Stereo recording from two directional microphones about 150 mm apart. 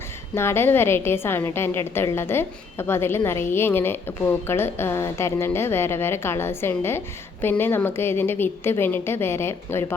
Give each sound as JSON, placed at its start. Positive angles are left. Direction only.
{"t": 0.3, "sound": "a woman's voice", "side_deg": 15}